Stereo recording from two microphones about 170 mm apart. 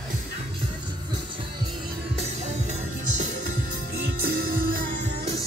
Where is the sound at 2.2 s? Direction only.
40° right (ahead or behind).